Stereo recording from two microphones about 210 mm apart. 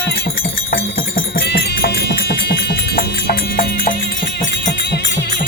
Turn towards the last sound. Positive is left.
turn(degrees=40)  # may be behind; listen again after turning